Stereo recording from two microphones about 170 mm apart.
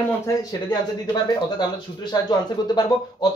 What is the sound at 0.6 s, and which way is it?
Speech, 25° left (ahead or behind).